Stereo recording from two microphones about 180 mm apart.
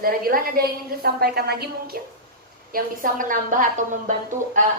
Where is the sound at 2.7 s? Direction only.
50° right (ahead or behind).